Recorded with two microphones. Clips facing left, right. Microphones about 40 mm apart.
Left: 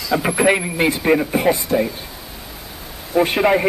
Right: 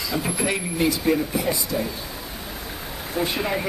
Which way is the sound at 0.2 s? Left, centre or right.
Left.